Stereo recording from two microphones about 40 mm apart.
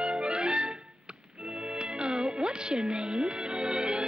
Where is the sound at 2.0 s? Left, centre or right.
Right.